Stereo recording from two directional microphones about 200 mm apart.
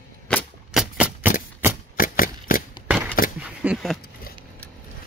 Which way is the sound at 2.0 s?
45° left (ahead or behind).